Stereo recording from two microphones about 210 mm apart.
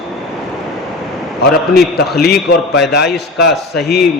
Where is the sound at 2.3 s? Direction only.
Centre (ahead or behind).